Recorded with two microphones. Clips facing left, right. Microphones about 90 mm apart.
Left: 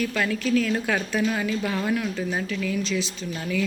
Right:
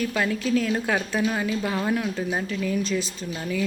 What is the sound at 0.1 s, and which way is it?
Speech, 20° right (ahead or behind).